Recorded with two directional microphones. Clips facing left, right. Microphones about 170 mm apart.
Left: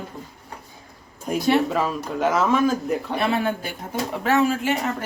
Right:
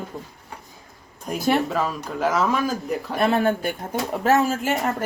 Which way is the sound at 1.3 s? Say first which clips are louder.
Left 2 dB; 5° left (ahead or behind).